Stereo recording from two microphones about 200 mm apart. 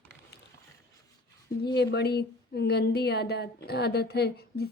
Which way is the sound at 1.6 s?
55° left (ahead or behind).